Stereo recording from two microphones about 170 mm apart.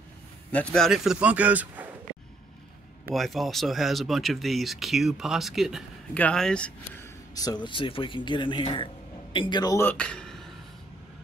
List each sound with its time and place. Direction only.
0.5 s speech: 5° left (ahead or behind)
3.1 s speech: centre (ahead or behind)
7.3 s a man's voice: 25° left (ahead or behind); by 10.4 s 5° left (ahead or behind)